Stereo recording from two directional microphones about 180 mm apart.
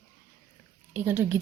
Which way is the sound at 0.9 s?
10° right (ahead or behind).